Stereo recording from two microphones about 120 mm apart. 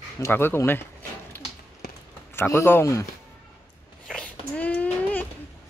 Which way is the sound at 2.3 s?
20° left (ahead or behind).